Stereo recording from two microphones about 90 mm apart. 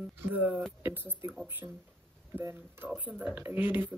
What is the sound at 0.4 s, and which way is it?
Speech, 15° right (ahead or behind).